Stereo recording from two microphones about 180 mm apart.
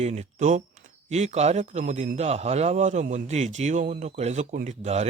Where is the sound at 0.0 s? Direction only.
40° right (ahead or behind).